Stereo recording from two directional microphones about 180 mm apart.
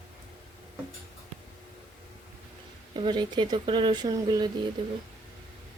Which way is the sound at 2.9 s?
25° right (ahead or behind).